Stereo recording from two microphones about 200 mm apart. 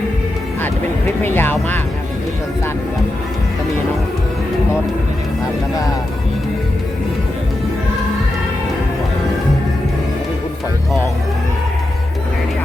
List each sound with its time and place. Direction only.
0.6 s speech: 10° left (ahead or behind)